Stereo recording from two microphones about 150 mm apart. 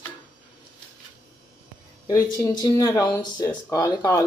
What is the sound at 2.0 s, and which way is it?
Speech, 25° left (ahead or behind).